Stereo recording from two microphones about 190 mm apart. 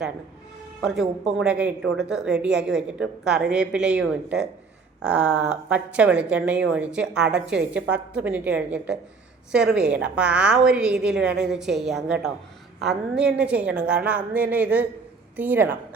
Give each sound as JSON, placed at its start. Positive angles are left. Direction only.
{"t": 0.8, "sound": "a woman's voice", "side_deg": 0}